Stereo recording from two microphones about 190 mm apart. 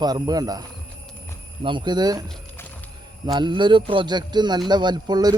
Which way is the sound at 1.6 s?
25° right (ahead or behind).